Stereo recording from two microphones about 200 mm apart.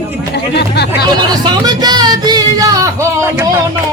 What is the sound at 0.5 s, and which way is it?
Speech, 55° left (ahead or behind).